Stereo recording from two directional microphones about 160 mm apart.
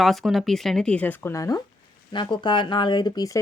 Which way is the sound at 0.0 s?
Centre (ahead or behind).